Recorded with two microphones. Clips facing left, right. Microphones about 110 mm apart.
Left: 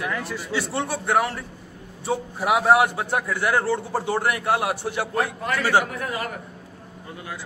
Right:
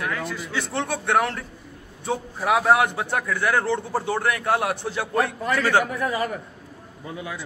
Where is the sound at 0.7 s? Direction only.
5° left (ahead or behind).